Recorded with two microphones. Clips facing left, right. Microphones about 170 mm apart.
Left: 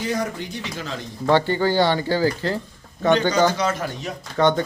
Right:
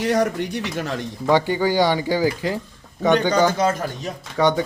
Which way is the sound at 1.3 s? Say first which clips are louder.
Even; 10° right (ahead or behind).